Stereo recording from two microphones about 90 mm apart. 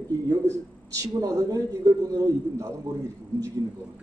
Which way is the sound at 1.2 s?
40° right (ahead or behind).